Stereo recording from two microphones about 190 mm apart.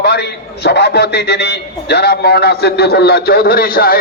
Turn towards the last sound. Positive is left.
turn(degrees=50)  # may be behind; listen again after turning